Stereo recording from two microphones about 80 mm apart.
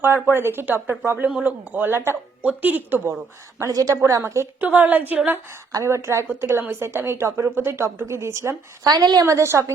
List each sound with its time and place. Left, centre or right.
0.0 s speech: right
3.7 s a woman's voice: right
4.6 s speech: right
5.7 s a woman's voice: right
8.9 s a woman's voice: right